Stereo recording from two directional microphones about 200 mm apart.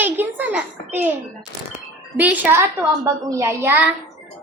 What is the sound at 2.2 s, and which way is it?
A woman's voice, 10° right (ahead or behind).